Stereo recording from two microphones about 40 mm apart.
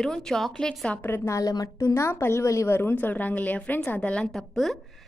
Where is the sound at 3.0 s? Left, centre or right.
Left.